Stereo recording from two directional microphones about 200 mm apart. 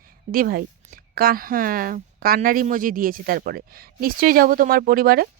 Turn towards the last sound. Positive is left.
turn(degrees=-50)  # may be behind; listen again after turning